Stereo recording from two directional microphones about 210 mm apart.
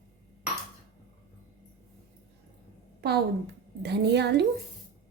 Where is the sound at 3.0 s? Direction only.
50° right (ahead or behind).